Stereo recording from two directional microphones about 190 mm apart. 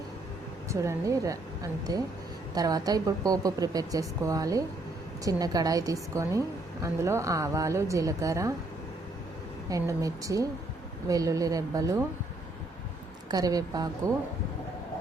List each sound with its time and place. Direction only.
0.7 s a woman's voice: 15° right (ahead or behind)
9.6 s a woman's voice: 15° right (ahead or behind)
13.3 s a woman's voice: 20° right (ahead or behind)